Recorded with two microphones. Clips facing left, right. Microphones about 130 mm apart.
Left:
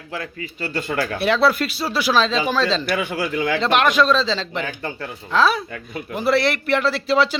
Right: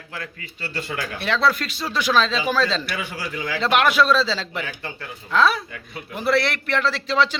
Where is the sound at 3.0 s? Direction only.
55° left (ahead or behind).